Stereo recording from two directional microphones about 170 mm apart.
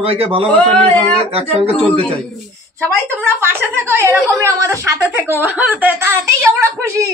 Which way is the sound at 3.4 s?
10° right (ahead or behind).